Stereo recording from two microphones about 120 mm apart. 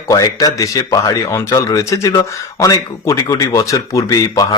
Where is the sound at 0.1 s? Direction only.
30° left (ahead or behind).